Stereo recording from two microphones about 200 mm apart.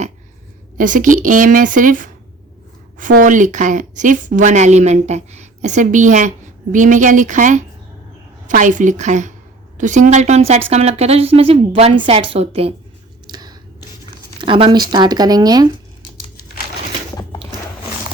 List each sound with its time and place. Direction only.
0.8 s speech: 40° right (ahead or behind)
3.2 s a woman's voice: 40° right (ahead or behind)
13.2 s a sound: 20° right (ahead or behind)
14.4 s a woman's voice: 25° right (ahead or behind)